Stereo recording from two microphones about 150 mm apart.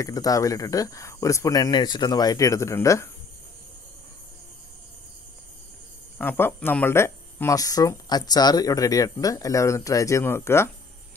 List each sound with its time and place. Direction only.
0.0 s speech: 25° left (ahead or behind)
6.1 s speech: 15° left (ahead or behind)